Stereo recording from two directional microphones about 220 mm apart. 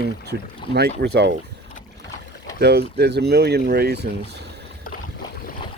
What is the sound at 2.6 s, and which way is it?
Speech, 50° right (ahead or behind).